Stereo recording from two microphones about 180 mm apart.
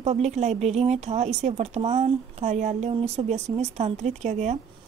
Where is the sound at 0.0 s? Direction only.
35° right (ahead or behind).